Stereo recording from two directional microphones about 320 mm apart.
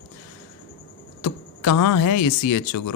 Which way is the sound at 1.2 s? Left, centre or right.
Left.